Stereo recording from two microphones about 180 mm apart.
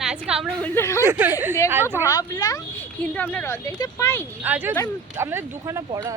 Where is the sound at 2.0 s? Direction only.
20° left (ahead or behind).